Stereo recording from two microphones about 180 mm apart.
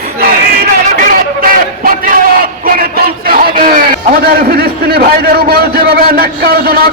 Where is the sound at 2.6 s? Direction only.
55° right (ahead or behind).